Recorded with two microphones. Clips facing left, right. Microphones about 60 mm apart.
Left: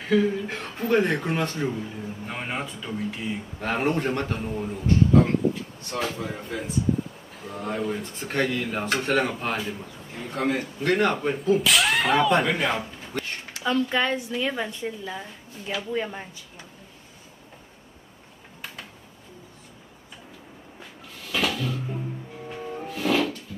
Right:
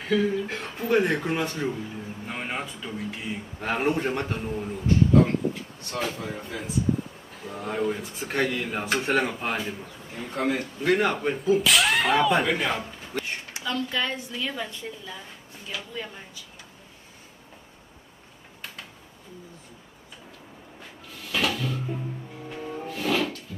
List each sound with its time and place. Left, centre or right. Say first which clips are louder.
0.0 s speech: left 2 dB; centre
13.2 s a sound: right 1 dB; centre
13.7 s a woman's voice: left 5 dB; left
15.7 s speech: left 7 dB; left
21.3 s drawer open or close: even; centre
22.9 s music: left 3 dB; centre